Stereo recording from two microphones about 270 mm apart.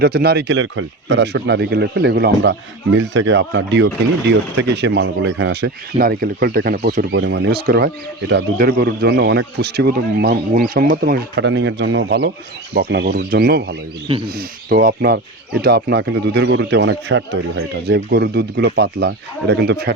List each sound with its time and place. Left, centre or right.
0.0 s speech: right